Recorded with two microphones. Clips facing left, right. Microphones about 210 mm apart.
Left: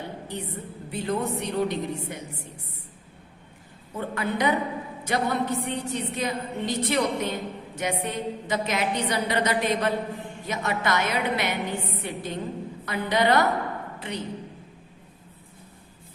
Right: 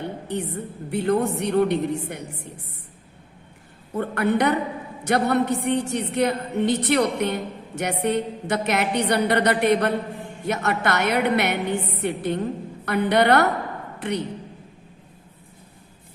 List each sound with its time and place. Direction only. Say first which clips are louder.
0.3 s a woman's voice: right 6 dB; 70° right (ahead or behind)
3.9 s a woman's voice: right 7 dB; 60° right (ahead or behind)